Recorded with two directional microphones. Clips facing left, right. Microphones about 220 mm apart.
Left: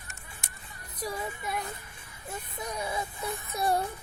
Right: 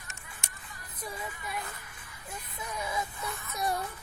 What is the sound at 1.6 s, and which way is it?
Music, 25° left (ahead or behind).